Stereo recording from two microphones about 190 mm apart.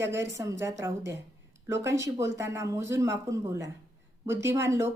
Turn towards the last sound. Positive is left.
turn(degrees=-15)  # may be behind; listen again after turning